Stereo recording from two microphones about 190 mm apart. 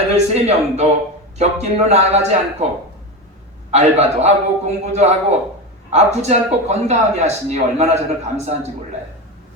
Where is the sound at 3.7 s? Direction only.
35° right (ahead or behind).